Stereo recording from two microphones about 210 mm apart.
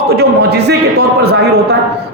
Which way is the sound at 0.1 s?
50° right (ahead or behind).